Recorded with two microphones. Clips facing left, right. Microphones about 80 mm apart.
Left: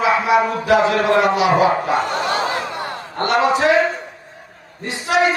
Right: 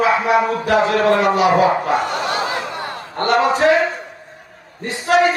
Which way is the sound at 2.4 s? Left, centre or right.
Left.